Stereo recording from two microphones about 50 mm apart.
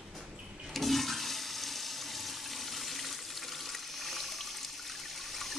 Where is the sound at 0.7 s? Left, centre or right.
Centre.